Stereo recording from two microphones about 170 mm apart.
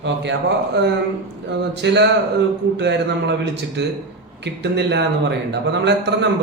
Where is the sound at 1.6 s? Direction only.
90° right.